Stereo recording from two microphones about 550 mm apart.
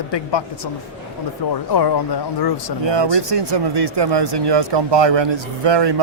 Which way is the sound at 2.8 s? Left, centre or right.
Right.